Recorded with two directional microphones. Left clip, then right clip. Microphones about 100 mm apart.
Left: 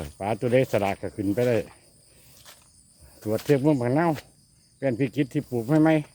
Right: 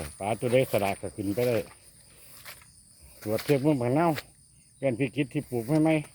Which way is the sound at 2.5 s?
40° right (ahead or behind).